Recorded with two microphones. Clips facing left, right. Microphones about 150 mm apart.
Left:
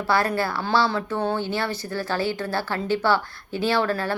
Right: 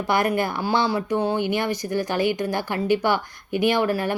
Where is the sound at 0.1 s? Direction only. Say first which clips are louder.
Right 1 dB; 20° right (ahead or behind).